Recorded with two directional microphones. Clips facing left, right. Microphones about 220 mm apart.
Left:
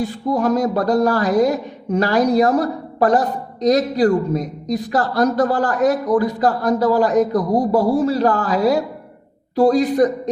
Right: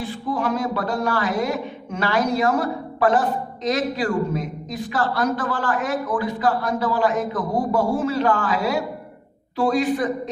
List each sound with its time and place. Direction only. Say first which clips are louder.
0.0 s speech: left 6 dB; 40° left (ahead or behind)